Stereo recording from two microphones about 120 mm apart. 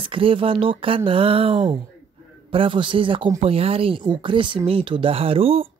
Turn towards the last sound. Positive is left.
turn(degrees=-50)  # may be behind; listen again after turning